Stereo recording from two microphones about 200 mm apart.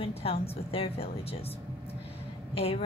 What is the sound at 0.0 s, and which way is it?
A woman's voice, 30° left (ahead or behind).